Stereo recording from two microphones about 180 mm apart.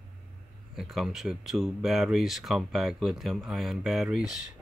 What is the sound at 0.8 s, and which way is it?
Speech, centre (ahead or behind).